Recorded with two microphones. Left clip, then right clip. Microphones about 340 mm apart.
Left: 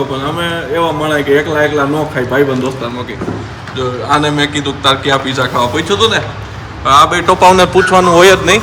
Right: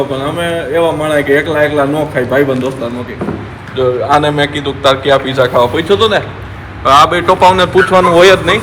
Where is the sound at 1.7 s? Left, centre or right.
Centre.